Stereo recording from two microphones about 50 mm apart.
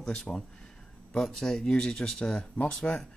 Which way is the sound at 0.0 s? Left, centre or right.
Centre.